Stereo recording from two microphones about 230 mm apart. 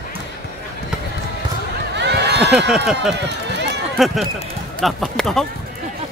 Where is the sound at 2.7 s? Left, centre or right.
Centre.